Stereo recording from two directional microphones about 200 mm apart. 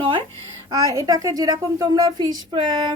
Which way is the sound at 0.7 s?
15° right (ahead or behind).